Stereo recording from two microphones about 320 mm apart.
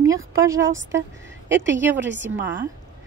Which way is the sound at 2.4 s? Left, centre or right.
Centre.